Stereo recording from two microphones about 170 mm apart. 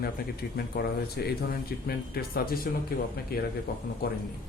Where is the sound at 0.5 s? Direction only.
65° left (ahead or behind).